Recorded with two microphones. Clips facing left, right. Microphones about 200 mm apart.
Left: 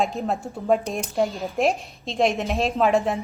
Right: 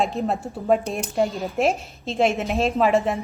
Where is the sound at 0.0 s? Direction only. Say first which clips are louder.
Right 1 dB; centre (ahead or behind).